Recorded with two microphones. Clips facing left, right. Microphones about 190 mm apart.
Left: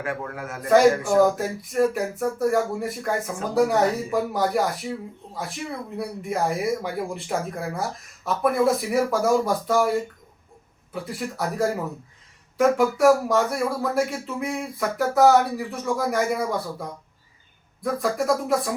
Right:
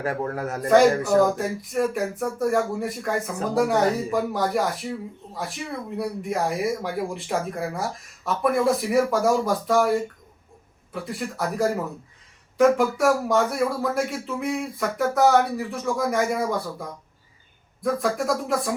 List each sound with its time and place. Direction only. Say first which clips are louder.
0.0 s a man's voice: right 4 dB; 40° right (ahead or behind)
1.2 s speech: left 1 dB; centre (ahead or behind)
10.9 s speech: even; centre (ahead or behind)
17.8 s speech: even; centre (ahead or behind)